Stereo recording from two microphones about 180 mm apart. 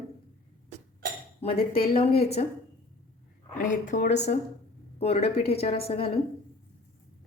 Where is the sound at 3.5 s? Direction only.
45° left (ahead or behind).